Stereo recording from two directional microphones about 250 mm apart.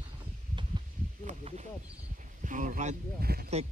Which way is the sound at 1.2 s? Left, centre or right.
Right.